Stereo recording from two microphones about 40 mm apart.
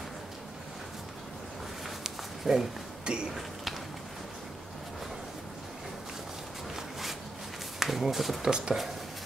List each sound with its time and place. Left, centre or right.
2.0 s a sound: centre
3.1 s speech: right
7.8 s speech: centre
8.4 s speech: right